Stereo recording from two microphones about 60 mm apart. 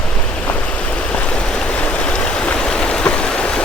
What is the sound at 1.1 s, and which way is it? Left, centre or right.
Stream, centre.